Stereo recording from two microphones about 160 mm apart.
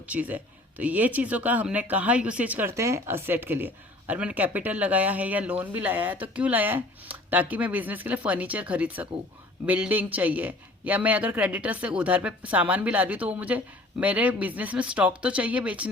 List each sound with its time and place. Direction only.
0.1 s speech: 10° right (ahead or behind)